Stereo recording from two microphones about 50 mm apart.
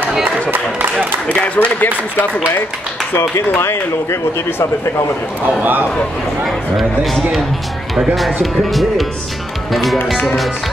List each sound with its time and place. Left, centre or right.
1.2 s speech: left
3.5 s speech: left
5.6 s speech: right
6.4 s speech: centre